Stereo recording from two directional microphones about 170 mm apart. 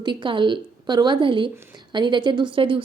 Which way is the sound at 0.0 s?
30° right (ahead or behind).